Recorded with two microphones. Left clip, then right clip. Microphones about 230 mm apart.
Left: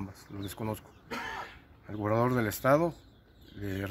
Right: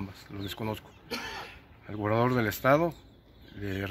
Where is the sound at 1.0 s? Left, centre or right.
Left.